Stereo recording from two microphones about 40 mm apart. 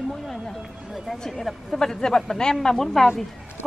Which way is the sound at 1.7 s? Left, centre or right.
Centre.